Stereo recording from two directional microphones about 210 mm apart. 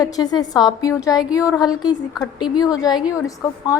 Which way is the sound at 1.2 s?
5° right (ahead or behind).